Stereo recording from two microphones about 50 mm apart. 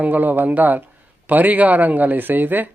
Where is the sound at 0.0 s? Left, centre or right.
Right.